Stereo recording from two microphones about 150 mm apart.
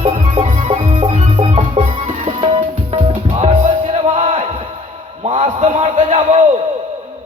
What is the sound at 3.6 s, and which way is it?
Music, 55° right (ahead or behind).